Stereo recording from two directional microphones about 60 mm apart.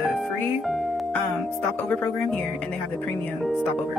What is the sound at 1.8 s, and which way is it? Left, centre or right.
Speech, left.